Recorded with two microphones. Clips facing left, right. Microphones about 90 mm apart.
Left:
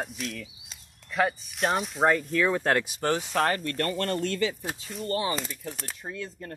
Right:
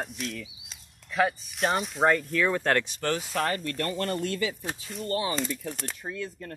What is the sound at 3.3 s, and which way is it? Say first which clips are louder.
Speech: left 3 dB; 45° left (ahead or behind).